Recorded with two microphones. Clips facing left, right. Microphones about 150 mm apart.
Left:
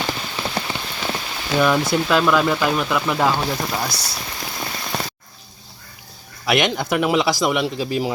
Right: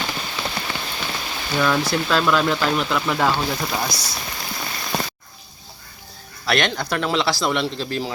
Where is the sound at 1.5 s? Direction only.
10° left (ahead or behind).